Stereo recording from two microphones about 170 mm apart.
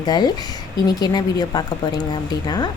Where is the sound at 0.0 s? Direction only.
25° left (ahead or behind).